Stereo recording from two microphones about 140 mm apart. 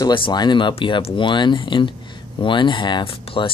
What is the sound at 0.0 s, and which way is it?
Speech, 35° left (ahead or behind).